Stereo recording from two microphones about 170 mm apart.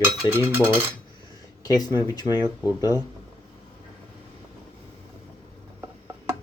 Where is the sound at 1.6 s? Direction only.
20° left (ahead or behind).